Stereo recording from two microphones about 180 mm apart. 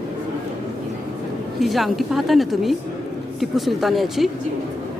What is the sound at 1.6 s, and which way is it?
A woman's voice, centre (ahead or behind).